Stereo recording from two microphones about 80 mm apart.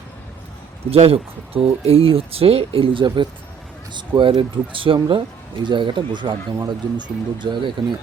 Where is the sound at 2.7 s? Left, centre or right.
Right.